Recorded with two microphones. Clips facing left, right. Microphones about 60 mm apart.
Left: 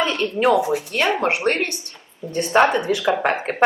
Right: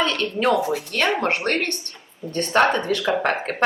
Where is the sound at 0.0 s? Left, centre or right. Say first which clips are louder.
Left 2 dB; centre.